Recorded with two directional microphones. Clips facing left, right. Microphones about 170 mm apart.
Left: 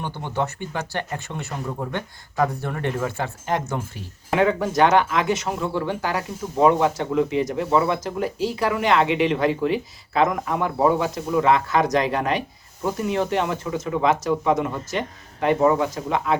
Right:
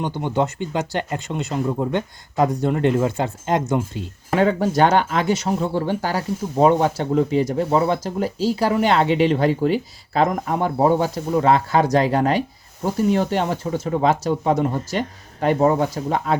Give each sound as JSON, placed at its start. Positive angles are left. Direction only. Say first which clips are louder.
{"t": 0.0, "sound": "speech", "louder": "right 5 dB", "side_deg": -15}
{"t": 4.4, "sound": "speech", "louder": "right 2 dB", "side_deg": -35}